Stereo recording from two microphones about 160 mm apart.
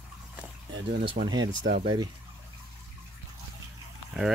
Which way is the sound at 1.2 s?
25° right (ahead or behind).